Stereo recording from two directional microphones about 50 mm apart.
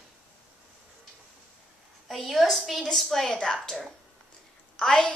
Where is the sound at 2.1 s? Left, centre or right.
Centre.